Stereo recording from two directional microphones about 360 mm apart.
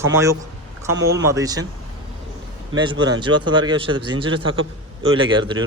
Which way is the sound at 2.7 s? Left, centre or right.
Centre.